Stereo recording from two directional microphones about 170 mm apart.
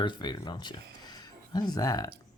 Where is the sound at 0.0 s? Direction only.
25° left (ahead or behind).